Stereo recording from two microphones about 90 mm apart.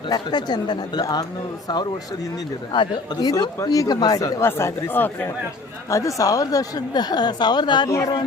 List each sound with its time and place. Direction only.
0.1 s speech: 50° left (ahead or behind); by 5.3 s 20° left (ahead or behind)
5.9 s speech: 40° left (ahead or behind); by 7.9 s 55° left (ahead or behind)
7.9 s speech: 40° left (ahead or behind)